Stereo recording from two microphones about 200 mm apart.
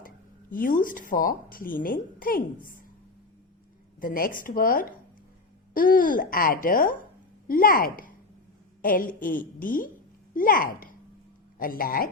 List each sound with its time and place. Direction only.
0.5 s a woman's voice: 45° left (ahead or behind)
4.0 s a woman's voice: 45° left (ahead or behind)